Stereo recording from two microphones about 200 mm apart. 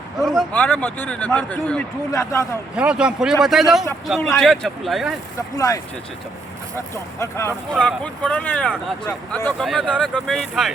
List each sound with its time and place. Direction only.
0.3 s a man's voice: 10° left (ahead or behind)
2.7 s speech: 5° right (ahead or behind)
5.5 s a man's voice: 15° left (ahead or behind)
6.9 s a man's voice: 15° left (ahead or behind)